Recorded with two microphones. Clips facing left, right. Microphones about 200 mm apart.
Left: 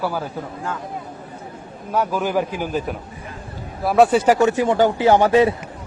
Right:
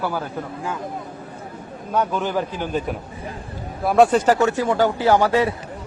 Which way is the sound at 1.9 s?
5° left (ahead or behind).